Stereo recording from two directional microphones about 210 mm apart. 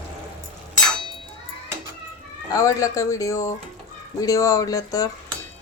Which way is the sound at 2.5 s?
15° left (ahead or behind).